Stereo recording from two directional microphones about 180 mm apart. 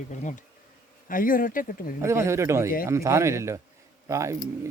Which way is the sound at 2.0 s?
15° right (ahead or behind).